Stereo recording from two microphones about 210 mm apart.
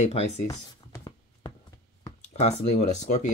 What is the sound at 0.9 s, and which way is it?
Writing, 20° left (ahead or behind).